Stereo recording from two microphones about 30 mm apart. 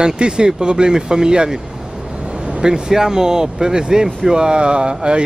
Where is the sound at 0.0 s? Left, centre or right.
Right.